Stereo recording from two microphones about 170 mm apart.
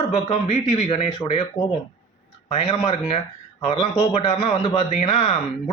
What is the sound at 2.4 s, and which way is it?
A man's voice, 35° left (ahead or behind).